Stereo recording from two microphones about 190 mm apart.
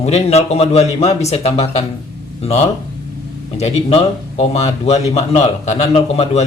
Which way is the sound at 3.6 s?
35° left (ahead or behind).